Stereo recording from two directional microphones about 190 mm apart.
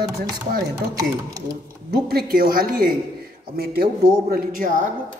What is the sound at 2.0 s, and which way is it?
Speech, 50° right (ahead or behind).